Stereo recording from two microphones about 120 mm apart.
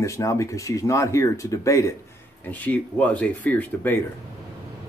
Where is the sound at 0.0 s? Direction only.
25° left (ahead or behind).